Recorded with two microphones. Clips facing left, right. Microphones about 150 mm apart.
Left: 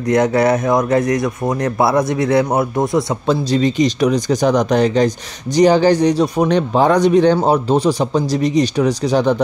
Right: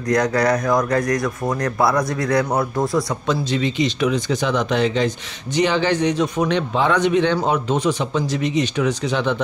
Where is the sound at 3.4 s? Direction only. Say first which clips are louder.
Left 6 dB; 40° left (ahead or behind).